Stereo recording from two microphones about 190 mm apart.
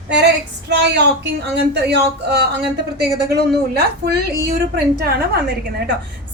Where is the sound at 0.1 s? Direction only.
65° right (ahead or behind).